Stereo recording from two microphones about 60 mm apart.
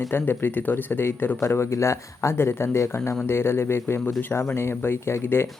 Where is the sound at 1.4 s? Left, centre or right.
Left.